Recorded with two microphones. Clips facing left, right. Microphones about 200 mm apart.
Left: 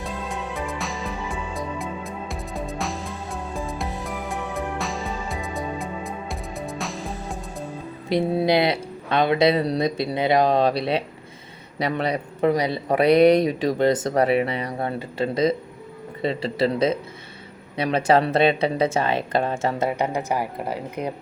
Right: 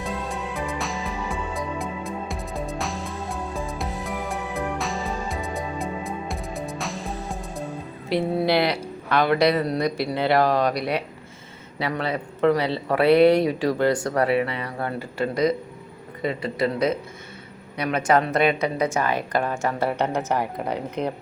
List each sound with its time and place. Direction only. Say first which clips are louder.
0.0 s music: right 1 dB; centre (ahead or behind)
8.1 s speech: left 1 dB; 20° left (ahead or behind)
19.9 s speech: even; 10° left (ahead or behind)